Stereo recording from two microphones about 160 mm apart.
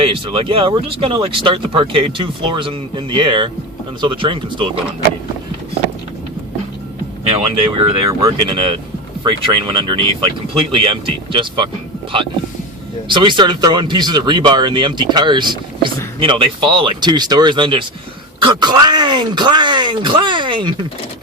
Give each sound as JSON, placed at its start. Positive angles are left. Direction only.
{"t": 0.0, "sound": "speech", "side_deg": -35}
{"t": 7.3, "sound": "speech", "side_deg": -35}
{"t": 13.1, "sound": "speech", "side_deg": -30}